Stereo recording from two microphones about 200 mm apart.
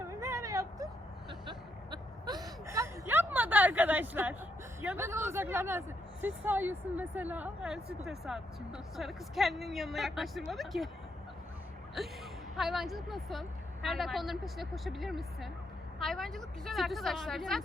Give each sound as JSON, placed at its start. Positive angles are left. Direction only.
{"t": 0.1, "sound": "a sound", "side_deg": -15}
{"t": 4.8, "sound": "a woman's voice", "side_deg": -10}
{"t": 12.0, "sound": "a woman's voice", "side_deg": 0}